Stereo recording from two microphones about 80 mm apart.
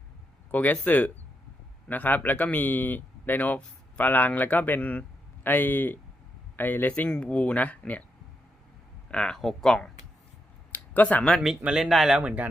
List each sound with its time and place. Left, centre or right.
0.5 s speech: left
9.0 s speech: centre
10.7 s a sound: left
11.6 s speech: centre
12.2 s speech: centre